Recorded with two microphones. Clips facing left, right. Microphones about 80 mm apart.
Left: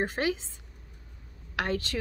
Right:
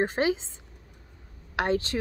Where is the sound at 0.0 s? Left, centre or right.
Right.